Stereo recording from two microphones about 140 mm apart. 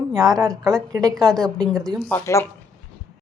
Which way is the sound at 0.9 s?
25° right (ahead or behind).